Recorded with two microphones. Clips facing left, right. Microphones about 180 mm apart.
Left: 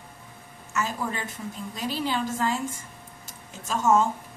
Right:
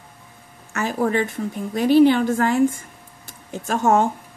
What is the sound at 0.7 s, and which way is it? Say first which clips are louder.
Speech: right 8 dB; 60° right (ahead or behind).